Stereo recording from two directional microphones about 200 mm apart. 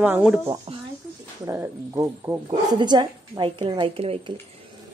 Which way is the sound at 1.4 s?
15° right (ahead or behind).